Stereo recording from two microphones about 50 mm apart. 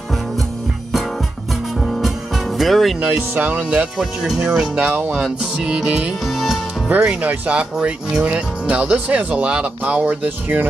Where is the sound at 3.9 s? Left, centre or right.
Centre.